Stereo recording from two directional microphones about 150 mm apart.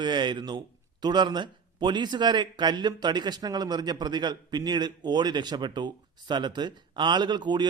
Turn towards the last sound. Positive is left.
turn(degrees=-30)  # may be behind; listen again after turning